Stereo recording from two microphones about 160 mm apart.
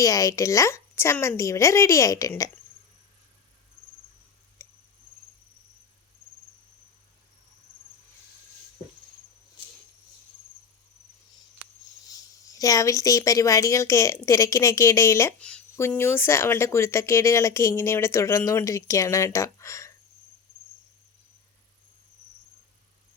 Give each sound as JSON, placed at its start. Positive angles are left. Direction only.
{"t": 0.0, "sound": "a woman's voice", "side_deg": 20}
{"t": 4.6, "sound": "cricket", "side_deg": 15}
{"t": 12.5, "sound": "a woman's voice", "side_deg": 20}